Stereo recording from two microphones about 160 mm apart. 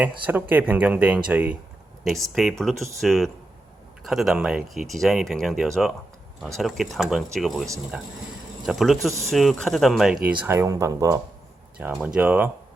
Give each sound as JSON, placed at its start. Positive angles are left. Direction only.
{"t": 0.0, "sound": "speech", "side_deg": -10}
{"t": 10.4, "sound": "speech", "side_deg": -15}